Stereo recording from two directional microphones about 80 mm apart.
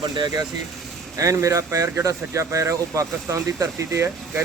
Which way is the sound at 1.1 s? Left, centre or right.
Right.